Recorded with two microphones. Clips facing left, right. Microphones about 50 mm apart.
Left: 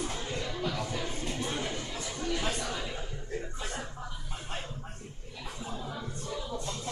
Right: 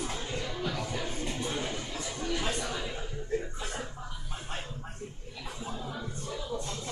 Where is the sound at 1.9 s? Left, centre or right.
Centre.